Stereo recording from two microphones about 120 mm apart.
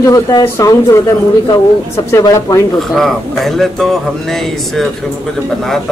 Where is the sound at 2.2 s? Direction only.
30° left (ahead or behind).